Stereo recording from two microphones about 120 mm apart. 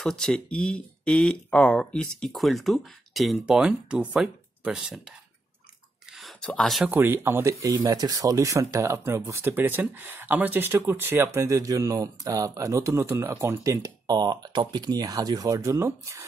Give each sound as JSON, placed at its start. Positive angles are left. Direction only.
{"t": 0.0, "sound": "speech", "side_deg": 5}
{"t": 6.4, "sound": "speech", "side_deg": 5}
{"t": 6.9, "sound": "speech", "side_deg": -20}